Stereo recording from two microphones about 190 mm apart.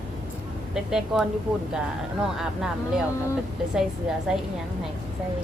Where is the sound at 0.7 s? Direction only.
5° right (ahead or behind).